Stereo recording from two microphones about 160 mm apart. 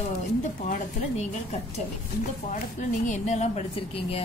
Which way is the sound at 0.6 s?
50° left (ahead or behind).